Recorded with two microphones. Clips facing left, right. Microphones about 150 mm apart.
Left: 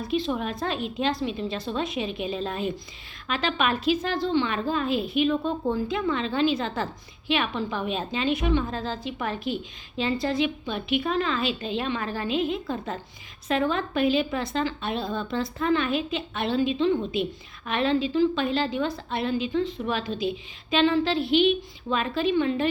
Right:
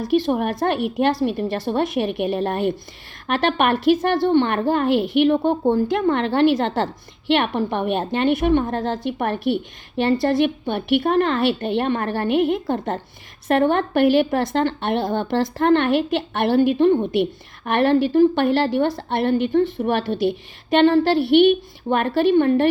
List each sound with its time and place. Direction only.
0.0 s a woman's voice: 65° right (ahead or behind)